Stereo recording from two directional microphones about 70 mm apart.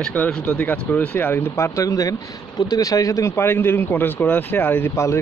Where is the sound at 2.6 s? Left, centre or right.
Left.